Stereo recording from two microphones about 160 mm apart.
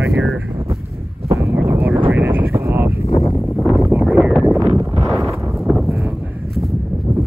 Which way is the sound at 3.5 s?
Centre (ahead or behind).